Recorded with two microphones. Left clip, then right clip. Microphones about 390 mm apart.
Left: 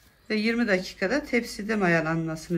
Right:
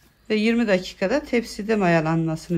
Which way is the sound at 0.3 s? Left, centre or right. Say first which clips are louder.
Right 4 dB; centre.